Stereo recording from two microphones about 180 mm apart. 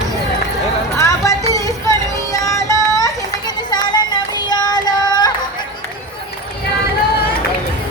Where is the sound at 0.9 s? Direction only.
15° left (ahead or behind).